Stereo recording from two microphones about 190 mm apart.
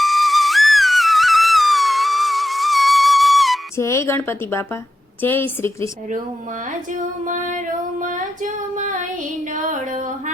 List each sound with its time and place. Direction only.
0.0 s music: centre (ahead or behind)
3.8 s a woman's voice: 15° left (ahead or behind)
6.7 s female singing: 40° right (ahead or behind)
9.5 s a sound: 40° right (ahead or behind)